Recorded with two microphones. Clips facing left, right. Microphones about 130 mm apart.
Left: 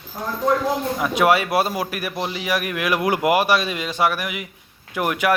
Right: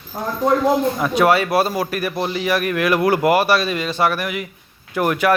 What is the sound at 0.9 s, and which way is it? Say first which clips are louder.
A man's voice: right 2 dB; 10° left (ahead or behind).